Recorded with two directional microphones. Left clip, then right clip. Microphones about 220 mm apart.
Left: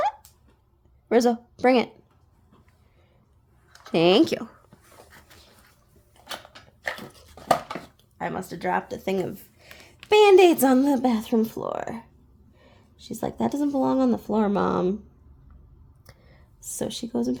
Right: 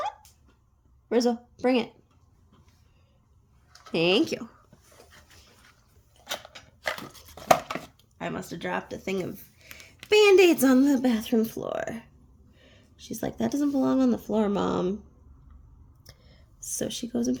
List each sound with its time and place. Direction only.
1.0 s a woman's voice: 35° left (ahead or behind)
3.8 s speech: 35° left (ahead or behind)
8.2 s speech: 20° left (ahead or behind)
12.5 s whispering: 25° left (ahead or behind)
13.2 s speech: 25° left (ahead or behind)
16.0 s a sound: 25° left (ahead or behind)
16.7 s speech: 25° left (ahead or behind)